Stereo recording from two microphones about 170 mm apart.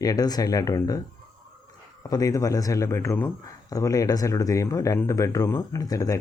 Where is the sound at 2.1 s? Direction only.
20° left (ahead or behind).